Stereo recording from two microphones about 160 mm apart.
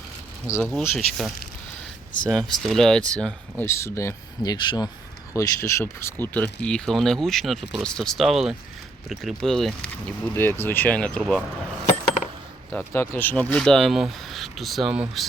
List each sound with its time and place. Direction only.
0.6 s speech: centre (ahead or behind)
3.7 s speech: 15° left (ahead or behind)
4.5 s speech: 30° left (ahead or behind)
5.3 s speech: 20° left (ahead or behind)
12.7 s speech: 15° left (ahead or behind); by 15.3 s 5° right (ahead or behind)